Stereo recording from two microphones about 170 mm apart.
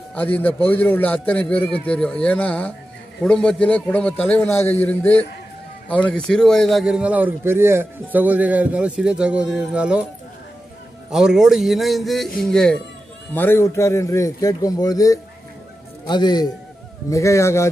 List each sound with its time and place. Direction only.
0.1 s a man's voice: 10° left (ahead or behind); by 10.0 s 5° right (ahead or behind)
11.1 s a man's voice: 5° right (ahead or behind); by 17.6 s 15° left (ahead or behind)